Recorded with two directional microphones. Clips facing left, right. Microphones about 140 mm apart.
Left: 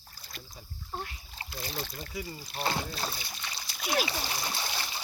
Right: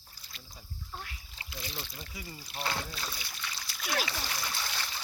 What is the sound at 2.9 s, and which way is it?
Splash, 35° left (ahead or behind).